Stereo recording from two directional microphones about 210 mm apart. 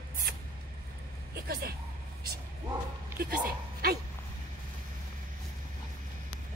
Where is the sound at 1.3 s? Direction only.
45° right (ahead or behind).